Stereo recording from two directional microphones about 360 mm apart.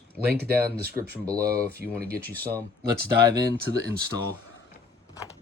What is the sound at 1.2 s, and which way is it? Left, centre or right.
Speech, centre.